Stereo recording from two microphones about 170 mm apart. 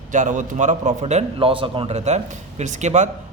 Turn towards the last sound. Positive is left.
turn(degrees=-45)  # may be behind; listen again after turning